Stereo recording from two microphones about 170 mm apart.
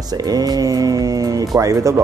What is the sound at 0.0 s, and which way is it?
Speech, 20° right (ahead or behind).